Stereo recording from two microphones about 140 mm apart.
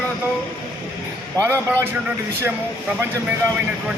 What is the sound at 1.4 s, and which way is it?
Speech, 20° right (ahead or behind).